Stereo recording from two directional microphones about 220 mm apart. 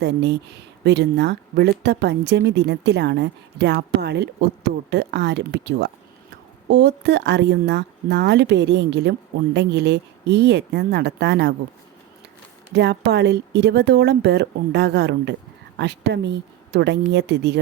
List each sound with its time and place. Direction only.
0.0 s speech: 50° right (ahead or behind)
12.7 s speech: 50° right (ahead or behind)